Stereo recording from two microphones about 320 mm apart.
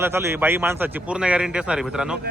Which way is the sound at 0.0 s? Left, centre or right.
Centre.